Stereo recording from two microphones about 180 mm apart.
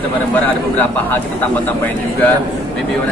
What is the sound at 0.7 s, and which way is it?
Speech, 10° left (ahead or behind).